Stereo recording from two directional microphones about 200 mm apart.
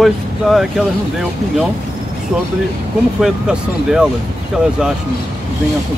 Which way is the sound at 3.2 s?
5° right (ahead or behind).